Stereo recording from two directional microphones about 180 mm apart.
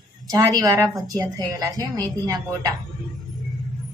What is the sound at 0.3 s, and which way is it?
A woman's voice, 20° right (ahead or behind).